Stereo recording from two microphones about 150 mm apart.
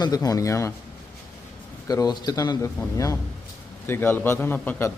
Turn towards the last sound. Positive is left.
turn(degrees=15)  # may be behind; listen again after turning